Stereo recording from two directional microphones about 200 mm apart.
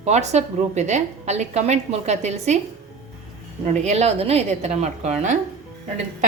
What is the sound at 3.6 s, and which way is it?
A woman's voice, 35° right (ahead or behind).